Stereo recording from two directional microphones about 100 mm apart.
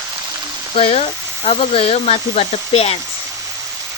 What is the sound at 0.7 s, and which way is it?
Speech, 80° left.